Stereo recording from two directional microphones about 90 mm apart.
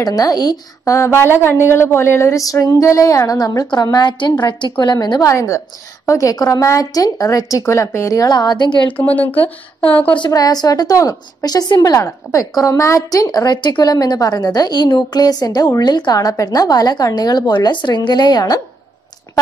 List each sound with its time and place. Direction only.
0.0 s a woman's voice: 45° left (ahead or behind)
0.9 s a sound: 30° left (ahead or behind); by 4.9 s 60° left (ahead or behind)
4.9 s a woman's voice: 45° left (ahead or behind)
5.3 s a sound: 35° left (ahead or behind); by 8.9 s 55° left (ahead or behind)
8.9 s a woman's voice: 20° left (ahead or behind)
10.3 s a woman's voice: 45° left (ahead or behind)